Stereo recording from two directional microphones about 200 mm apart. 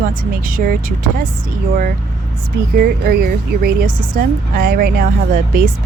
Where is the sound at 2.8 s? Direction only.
50° right (ahead or behind).